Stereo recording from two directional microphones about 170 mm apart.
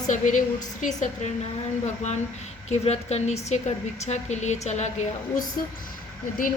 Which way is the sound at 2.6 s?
40° left (ahead or behind).